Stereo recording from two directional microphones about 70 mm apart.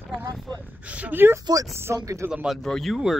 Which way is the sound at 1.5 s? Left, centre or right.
Right.